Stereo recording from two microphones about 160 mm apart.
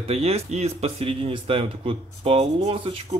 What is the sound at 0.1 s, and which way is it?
A man's voice, 40° right (ahead or behind).